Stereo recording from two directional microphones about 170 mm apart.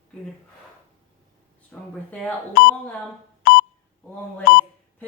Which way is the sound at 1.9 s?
5° left (ahead or behind).